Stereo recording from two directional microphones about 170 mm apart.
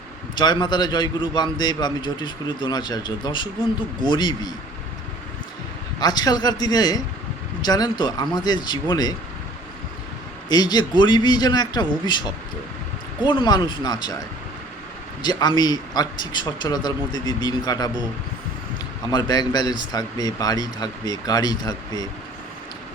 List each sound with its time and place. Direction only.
0.3 s a man's voice: 25° left (ahead or behind)
6.0 s a man's voice: 25° left (ahead or behind)
10.5 s a man's voice: 25° left (ahead or behind)
13.2 s a man's voice: 25° left (ahead or behind)
19.1 s a man's voice: 25° left (ahead or behind)